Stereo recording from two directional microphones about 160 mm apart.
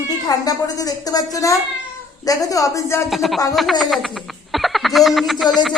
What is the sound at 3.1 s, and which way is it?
Music, centre (ahead or behind).